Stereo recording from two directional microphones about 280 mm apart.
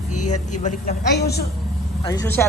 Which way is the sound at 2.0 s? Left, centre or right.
Centre.